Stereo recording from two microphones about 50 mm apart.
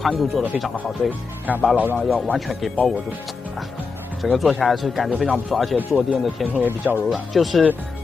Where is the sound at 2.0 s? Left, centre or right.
Centre.